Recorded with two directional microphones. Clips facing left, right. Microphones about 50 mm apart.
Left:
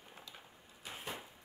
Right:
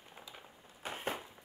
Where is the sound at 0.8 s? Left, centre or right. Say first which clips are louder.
Right 6 dB; right.